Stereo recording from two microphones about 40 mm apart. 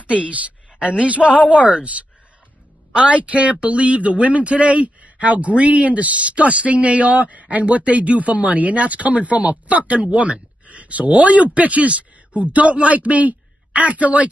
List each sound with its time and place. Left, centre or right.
0.0 s a woman's voice: right
2.9 s speech: right